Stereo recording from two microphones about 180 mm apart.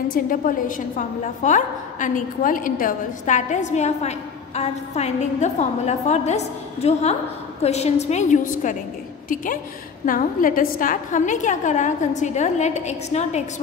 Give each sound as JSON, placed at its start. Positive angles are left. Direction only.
{"t": 0.1, "sound": "a woman's voice", "side_deg": 50}